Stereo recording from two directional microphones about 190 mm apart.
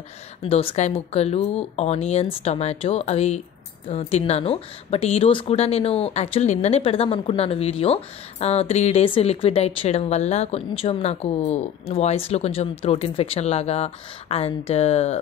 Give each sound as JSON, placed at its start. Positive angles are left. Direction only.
{"t": 0.4, "sound": "speech", "side_deg": 30}